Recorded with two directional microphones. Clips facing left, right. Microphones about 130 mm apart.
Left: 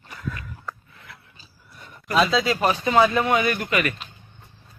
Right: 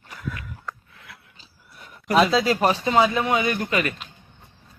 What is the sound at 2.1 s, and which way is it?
Speech, 20° right (ahead or behind).